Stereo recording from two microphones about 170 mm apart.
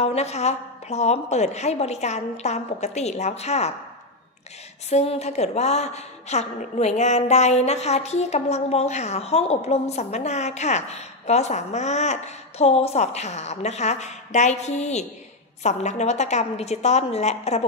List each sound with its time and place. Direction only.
0.0 s a woman's voice: 40° left (ahead or behind)
4.8 s a woman's voice: 40° left (ahead or behind)